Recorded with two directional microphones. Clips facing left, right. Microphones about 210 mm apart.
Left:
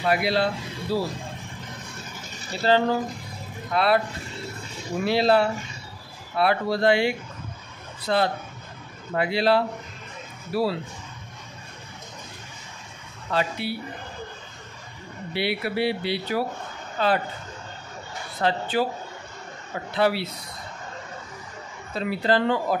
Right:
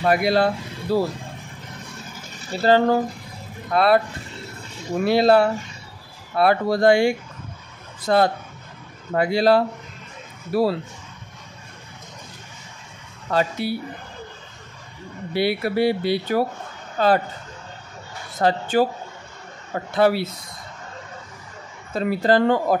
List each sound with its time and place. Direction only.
0.0 s speech: 45° right (ahead or behind)
2.5 s speech: 40° right (ahead or behind)
3.7 s speech: 45° right (ahead or behind)
5.0 s speech: 50° right (ahead or behind)
13.3 s speech: 45° right (ahead or behind)
15.3 s speech: 45° right (ahead or behind)
18.4 s speech: 45° right (ahead or behind)
19.9 s speech: 45° right (ahead or behind)
21.9 s speech: 45° right (ahead or behind)